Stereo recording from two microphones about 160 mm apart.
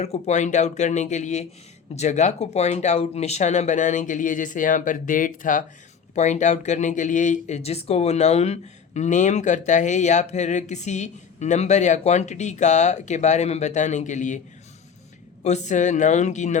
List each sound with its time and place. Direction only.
0.0 s speech: 45° left (ahead or behind)
15.4 s speech: 45° left (ahead or behind)